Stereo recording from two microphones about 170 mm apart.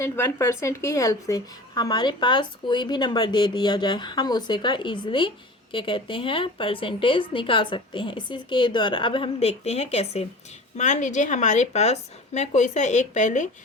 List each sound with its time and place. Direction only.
0.0 s a woman's voice: 15° left (ahead or behind); by 13.5 s 45° left (ahead or behind)